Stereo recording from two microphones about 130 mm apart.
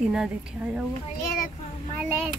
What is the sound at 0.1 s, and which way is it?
Speech, 10° right (ahead or behind).